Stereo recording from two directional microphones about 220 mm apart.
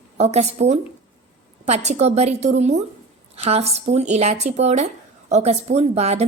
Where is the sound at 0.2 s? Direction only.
30° right (ahead or behind).